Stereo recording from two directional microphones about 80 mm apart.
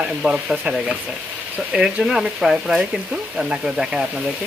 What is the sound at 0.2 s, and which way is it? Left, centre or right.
Speech, centre.